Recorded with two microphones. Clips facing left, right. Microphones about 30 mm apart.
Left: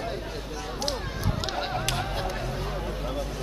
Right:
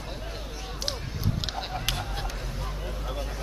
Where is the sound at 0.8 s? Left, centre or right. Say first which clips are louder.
Left 3 dB; centre.